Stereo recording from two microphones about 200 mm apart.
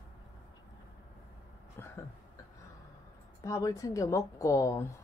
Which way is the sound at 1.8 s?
10° left (ahead or behind).